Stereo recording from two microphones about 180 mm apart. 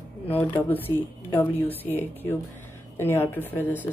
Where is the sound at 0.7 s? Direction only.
10° left (ahead or behind).